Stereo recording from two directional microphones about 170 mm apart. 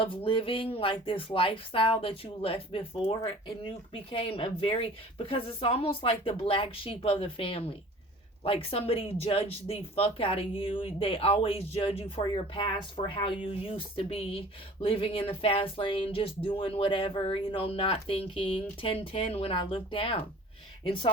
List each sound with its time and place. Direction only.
0.3 s speech: 30° left (ahead or behind)